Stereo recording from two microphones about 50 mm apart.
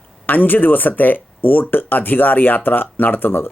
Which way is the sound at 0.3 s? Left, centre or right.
Left.